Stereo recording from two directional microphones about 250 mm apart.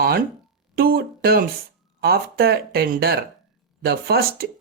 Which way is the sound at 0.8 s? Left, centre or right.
Right.